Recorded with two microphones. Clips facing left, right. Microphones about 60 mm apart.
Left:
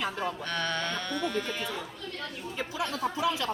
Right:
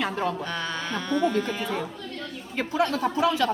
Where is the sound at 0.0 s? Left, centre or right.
Right.